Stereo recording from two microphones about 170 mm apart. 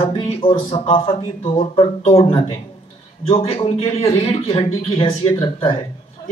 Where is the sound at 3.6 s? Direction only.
35° left (ahead or behind).